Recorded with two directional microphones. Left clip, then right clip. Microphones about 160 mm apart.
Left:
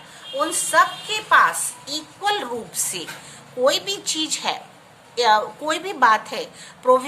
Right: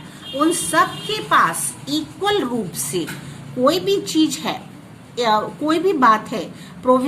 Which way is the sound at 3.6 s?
30° left (ahead or behind).